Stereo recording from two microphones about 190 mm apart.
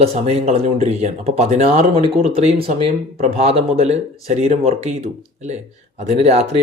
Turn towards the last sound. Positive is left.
turn(degrees=-35)  # may be behind; listen again after turning